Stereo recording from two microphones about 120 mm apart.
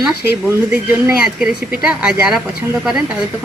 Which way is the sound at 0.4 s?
15° right (ahead or behind).